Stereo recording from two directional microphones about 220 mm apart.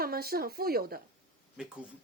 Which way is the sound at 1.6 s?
5° right (ahead or behind).